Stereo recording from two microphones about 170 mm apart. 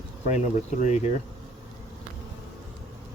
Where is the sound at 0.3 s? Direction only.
40° left (ahead or behind).